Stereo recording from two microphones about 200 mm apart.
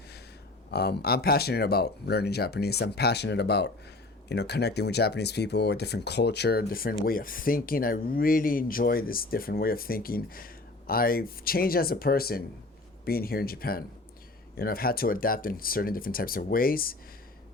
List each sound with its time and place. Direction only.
0.7 s speech: 55° left (ahead or behind)